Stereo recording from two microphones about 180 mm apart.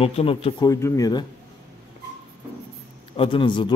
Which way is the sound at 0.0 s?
30° left (ahead or behind).